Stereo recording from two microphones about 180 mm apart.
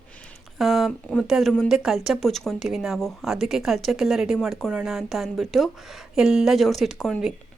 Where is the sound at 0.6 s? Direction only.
Centre (ahead or behind).